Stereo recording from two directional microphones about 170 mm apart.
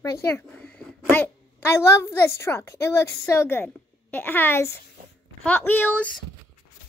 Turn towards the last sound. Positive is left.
turn(degrees=10)  # may be behind; listen again after turning